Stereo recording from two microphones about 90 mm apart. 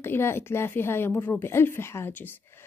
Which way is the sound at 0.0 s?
25° left (ahead or behind).